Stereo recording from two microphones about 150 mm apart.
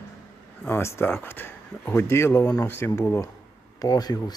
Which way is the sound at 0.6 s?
15° left (ahead or behind).